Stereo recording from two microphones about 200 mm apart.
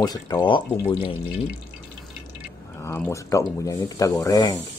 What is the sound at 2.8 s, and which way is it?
Speech, 10° left (ahead or behind).